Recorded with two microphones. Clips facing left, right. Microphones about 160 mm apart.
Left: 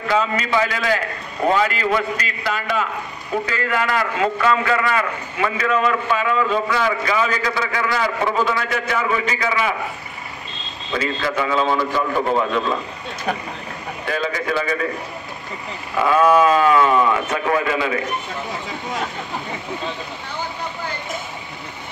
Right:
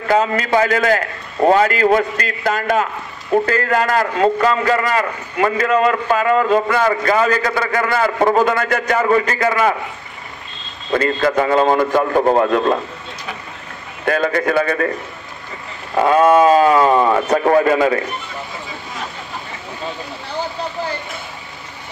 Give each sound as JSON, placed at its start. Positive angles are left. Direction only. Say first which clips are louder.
{"t": 0.1, "sound": "a man's voice", "louder": "right 4 dB", "side_deg": -50}
{"t": 10.9, "sound": "a man's voice", "louder": "right 7 dB", "side_deg": -50}
{"t": 14.0, "sound": "a man's voice", "louder": "right 7 dB", "side_deg": -55}
{"t": 15.9, "sound": "a man's voice", "louder": "right 3 dB", "side_deg": -40}